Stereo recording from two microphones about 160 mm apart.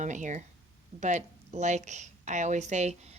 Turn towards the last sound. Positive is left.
turn(degrees=-45)  # may be behind; listen again after turning